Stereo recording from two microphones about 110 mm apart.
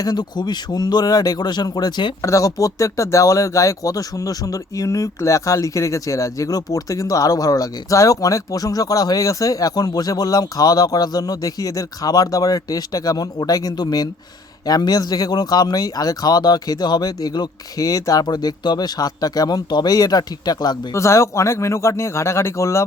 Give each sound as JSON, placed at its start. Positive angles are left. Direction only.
{"t": 0.0, "sound": "speech", "side_deg": 40}
{"t": 2.2, "sound": "speech", "side_deg": 30}